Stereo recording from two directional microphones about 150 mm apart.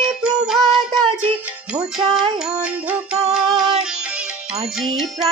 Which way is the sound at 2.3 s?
5° right (ahead or behind).